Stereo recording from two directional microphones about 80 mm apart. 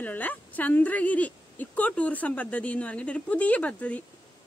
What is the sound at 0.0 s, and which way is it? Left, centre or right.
A woman's voice, left.